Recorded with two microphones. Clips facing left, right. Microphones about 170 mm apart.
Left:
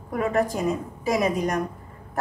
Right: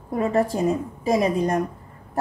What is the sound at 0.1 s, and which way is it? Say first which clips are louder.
A woman's voice: right 2 dB; 25° right (ahead or behind).